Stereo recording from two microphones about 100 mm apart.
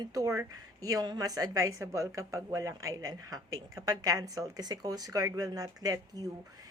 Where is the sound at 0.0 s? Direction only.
35° right (ahead or behind).